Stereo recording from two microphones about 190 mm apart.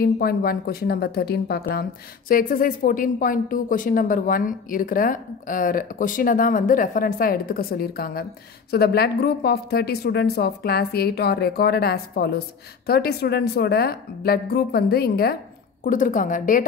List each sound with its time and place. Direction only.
0.0 s a woman's voice: 50° left (ahead or behind)
15.8 s speech: 45° left (ahead or behind)